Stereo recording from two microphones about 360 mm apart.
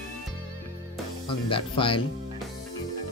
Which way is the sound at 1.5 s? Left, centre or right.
Centre.